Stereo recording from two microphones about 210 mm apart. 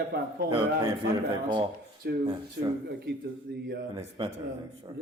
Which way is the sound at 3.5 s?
50° right (ahead or behind).